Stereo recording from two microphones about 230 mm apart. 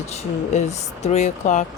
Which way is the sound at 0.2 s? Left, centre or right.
Left.